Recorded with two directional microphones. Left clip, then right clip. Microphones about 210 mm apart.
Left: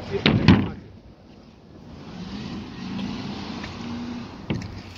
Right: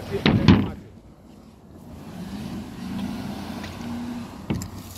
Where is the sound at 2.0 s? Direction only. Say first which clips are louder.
Even; 50° right (ahead or behind).